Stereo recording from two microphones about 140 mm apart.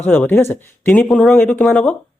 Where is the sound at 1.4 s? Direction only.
10° left (ahead or behind).